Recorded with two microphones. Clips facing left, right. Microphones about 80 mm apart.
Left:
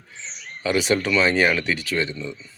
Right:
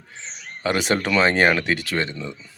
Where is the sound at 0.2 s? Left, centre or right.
Right.